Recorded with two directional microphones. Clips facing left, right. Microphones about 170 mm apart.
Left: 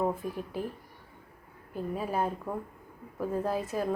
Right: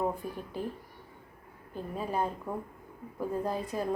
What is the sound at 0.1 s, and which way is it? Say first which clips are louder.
Speech: left 3 dB; centre (ahead or behind).